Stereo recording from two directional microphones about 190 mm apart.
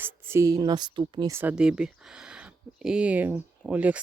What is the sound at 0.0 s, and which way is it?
Speech, 15° right (ahead or behind).